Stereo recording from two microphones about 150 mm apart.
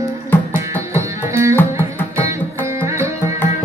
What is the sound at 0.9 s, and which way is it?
Music, 20° right (ahead or behind).